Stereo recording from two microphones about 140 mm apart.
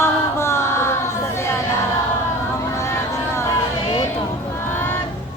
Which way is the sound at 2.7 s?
20° left (ahead or behind).